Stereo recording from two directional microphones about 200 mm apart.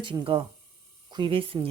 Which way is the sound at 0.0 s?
25° right (ahead or behind).